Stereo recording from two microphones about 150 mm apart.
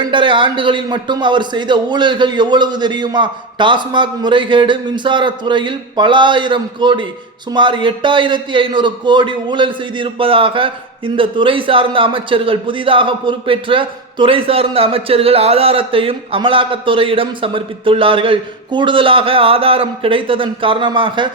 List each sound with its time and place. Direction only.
0.0 s a man's voice: 35° right (ahead or behind)